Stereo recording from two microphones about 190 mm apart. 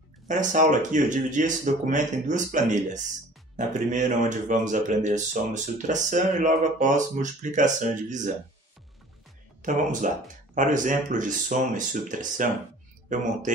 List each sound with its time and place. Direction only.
0.3 s speech: 40° right (ahead or behind)
9.6 s speech: 45° right (ahead or behind)